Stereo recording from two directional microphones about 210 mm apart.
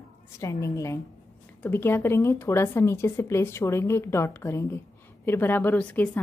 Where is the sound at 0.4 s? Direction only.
15° left (ahead or behind).